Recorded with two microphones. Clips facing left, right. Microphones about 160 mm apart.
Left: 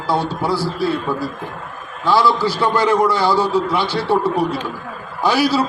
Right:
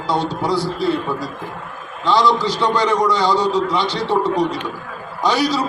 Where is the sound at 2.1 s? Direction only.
5° left (ahead or behind).